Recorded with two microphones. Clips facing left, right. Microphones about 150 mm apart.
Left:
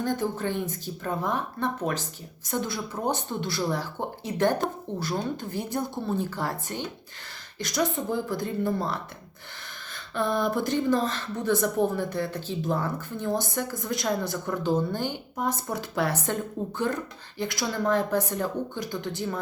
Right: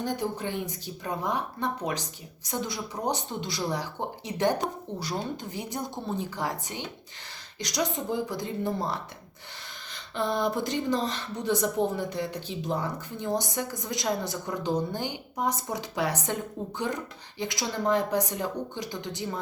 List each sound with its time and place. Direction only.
0.0 s a woman's voice: 15° right (ahead or behind)